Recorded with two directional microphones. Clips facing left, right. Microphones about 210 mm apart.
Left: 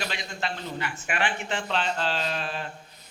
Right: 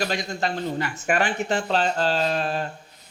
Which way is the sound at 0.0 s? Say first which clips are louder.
Right 7 dB; 40° right (ahead or behind).